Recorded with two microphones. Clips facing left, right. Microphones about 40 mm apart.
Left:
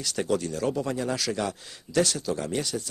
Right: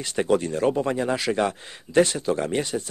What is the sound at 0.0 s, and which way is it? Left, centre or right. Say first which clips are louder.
A man's voice: right 5 dB; right.